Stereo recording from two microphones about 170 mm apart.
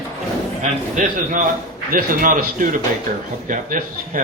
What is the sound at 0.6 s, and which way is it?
A man's voice, 50° right (ahead or behind).